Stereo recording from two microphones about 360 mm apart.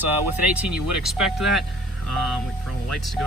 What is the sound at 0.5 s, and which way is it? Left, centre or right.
Speech, centre.